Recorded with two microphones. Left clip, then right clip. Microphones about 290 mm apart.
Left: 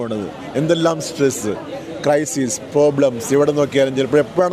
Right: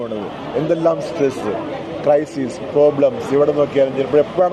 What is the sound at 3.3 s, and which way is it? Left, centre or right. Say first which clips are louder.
A man's voice: even; left.